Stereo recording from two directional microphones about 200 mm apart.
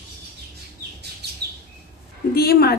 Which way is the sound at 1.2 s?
55° right (ahead or behind).